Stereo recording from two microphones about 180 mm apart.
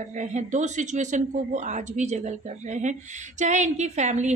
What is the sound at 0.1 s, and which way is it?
A woman's voice, 40° right (ahead or behind).